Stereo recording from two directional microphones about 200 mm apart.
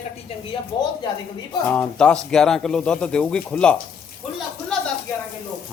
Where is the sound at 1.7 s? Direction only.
5° left (ahead or behind).